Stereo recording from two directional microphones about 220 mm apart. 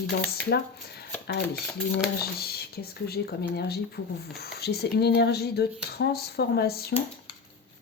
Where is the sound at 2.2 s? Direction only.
45° left (ahead or behind).